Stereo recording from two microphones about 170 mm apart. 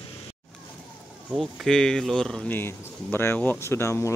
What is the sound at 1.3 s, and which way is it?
Speech, centre (ahead or behind).